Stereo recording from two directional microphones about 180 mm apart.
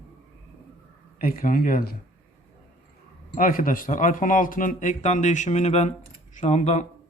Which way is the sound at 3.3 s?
50° left (ahead or behind).